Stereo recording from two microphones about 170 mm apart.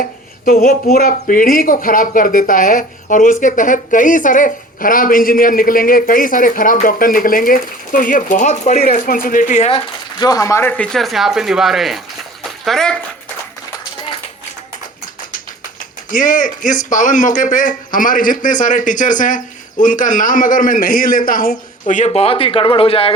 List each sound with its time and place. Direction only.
0.0 s speech: 55° left (ahead or behind)
8.9 s speech: 55° left (ahead or behind)
9.7 s speech: 20° left (ahead or behind); by 11.9 s centre (ahead or behind)
12.4 s a sound: 5° left (ahead or behind)
16.0 s speech: 50° left (ahead or behind); by 23.1 s 35° left (ahead or behind)